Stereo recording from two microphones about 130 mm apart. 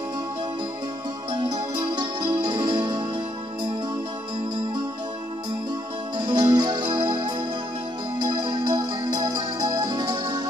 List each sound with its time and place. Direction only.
1.3 s music: 35° right (ahead or behind)
6.1 s music: 35° right (ahead or behind)